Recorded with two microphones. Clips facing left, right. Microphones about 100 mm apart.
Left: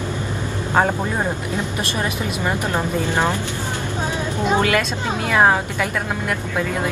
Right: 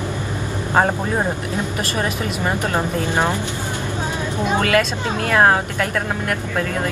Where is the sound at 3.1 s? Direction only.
15° right (ahead or behind).